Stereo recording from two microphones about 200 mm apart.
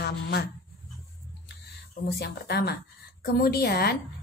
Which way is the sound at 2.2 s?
55° left (ahead or behind).